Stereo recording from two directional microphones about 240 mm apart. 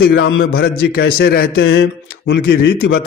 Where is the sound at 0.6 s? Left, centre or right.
Left.